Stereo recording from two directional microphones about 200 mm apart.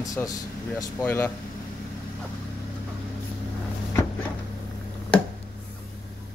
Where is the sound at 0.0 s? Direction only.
15° left (ahead or behind).